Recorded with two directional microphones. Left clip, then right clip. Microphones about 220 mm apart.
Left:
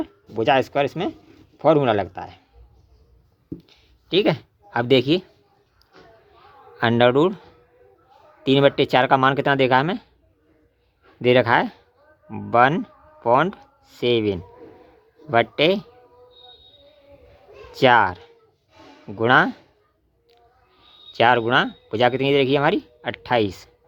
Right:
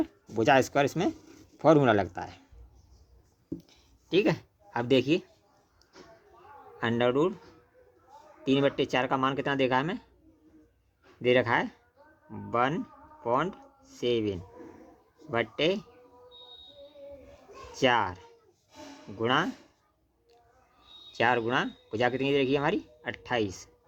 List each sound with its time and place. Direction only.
0.0 s speech: centre (ahead or behind)
4.1 s speech: 20° left (ahead or behind)
6.7 s speech: 35° left (ahead or behind)
8.4 s speech: 35° left (ahead or behind)
11.2 s speech: 30° left (ahead or behind)
17.7 s speech: 30° left (ahead or behind)
21.1 s speech: 30° left (ahead or behind)